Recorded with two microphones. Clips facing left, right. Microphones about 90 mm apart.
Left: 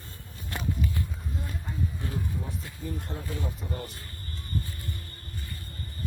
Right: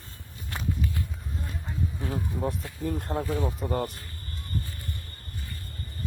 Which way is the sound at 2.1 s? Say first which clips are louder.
Right 5 dB; 60° right (ahead or behind).